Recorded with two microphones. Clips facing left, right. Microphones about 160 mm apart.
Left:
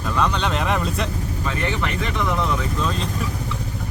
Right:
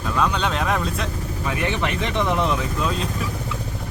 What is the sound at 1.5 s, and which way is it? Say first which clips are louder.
Speech: right 2 dB; 15° right (ahead or behind).